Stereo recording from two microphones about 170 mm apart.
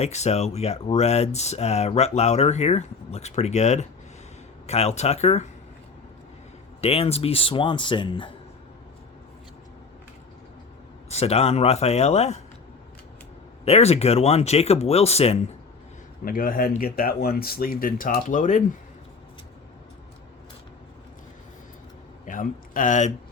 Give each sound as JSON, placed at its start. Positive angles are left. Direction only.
{"t": 0.0, "sound": "speech", "side_deg": 40}
{"t": 6.8, "sound": "speech", "side_deg": 35}
{"t": 11.1, "sound": "speech", "side_deg": 35}
{"t": 13.7, "sound": "speech", "side_deg": 35}
{"t": 16.2, "sound": "speech", "side_deg": 55}
{"t": 22.3, "sound": "speech", "side_deg": 50}